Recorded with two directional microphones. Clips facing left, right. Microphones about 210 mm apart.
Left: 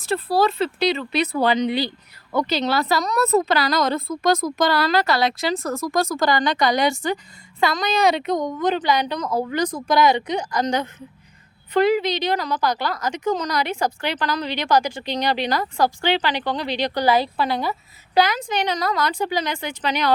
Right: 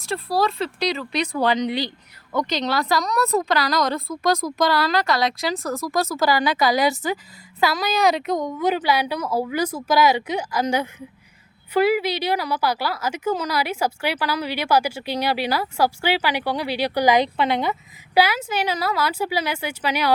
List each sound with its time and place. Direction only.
0.0 s speech: centre (ahead or behind)
1.4 s speech: 25° left (ahead or behind)
1.6 s a woman's voice: 5° left (ahead or behind); by 17.7 s 20° right (ahead or behind)
18.1 s a woman's voice: 10° right (ahead or behind)